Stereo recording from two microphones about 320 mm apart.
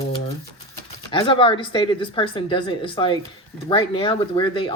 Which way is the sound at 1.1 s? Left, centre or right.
Centre.